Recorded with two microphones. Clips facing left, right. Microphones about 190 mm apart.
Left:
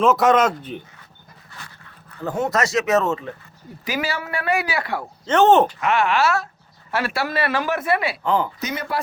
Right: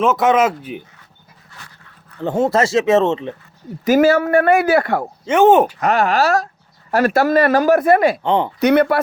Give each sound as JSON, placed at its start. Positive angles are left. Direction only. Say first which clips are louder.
{"t": 0.0, "sound": "speech", "louder": "right 2 dB", "side_deg": 0}
{"t": 2.2, "sound": "speech", "louder": "right 6 dB", "side_deg": -30}
{"t": 3.8, "sound": "speech", "louder": "right 14 dB", "side_deg": -45}
{"t": 5.2, "sound": "speech", "louder": "right 3 dB", "side_deg": -10}
{"t": 5.8, "sound": "speech", "louder": "right 4 dB", "side_deg": -40}
{"t": 8.2, "sound": "speech", "louder": "right 4 dB", "side_deg": -25}
{"t": 8.6, "sound": "speech", "louder": "right 14 dB", "side_deg": -60}